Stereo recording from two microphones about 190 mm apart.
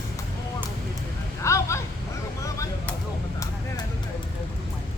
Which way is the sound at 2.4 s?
15° left (ahead or behind).